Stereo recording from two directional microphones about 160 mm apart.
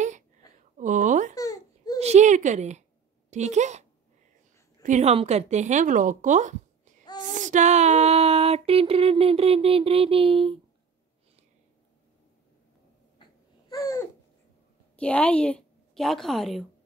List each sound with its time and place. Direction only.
0.7 s a sound: 50° right (ahead or behind)
1.3 s babbling: 20° left (ahead or behind)
2.0 s a woman's voice: 45° right (ahead or behind)
4.8 s a woman's voice: 45° right (ahead or behind)
7.3 s a sound: 50° right (ahead or behind); by 10.6 s 35° right (ahead or behind)
13.7 s babbling: 20° left (ahead or behind)
15.0 s a woman's voice: 10° left (ahead or behind)